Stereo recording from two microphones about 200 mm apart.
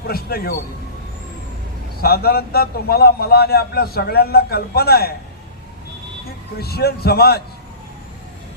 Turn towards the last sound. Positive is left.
turn(degrees=50)  # may be behind; listen again after turning